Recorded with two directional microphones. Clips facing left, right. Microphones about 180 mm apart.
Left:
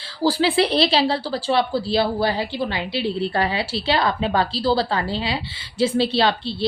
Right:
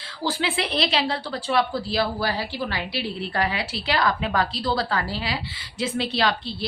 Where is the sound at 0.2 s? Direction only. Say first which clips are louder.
Left 8 dB; 35° left (ahead or behind).